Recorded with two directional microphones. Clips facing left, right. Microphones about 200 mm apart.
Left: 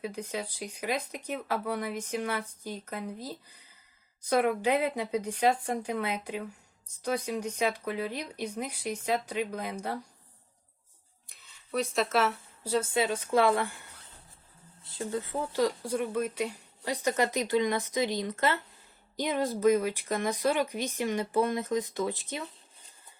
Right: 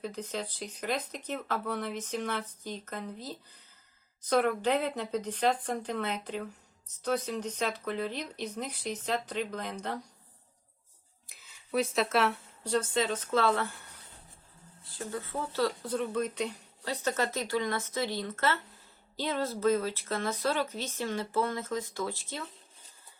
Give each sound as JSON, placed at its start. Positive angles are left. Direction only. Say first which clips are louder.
{"t": 0.0, "sound": "speech", "louder": "left 1 dB", "side_deg": 10}
{"t": 11.3, "sound": "speech", "louder": "right 1 dB", "side_deg": 0}
{"t": 14.8, "sound": "speech", "louder": "left 4 dB", "side_deg": 20}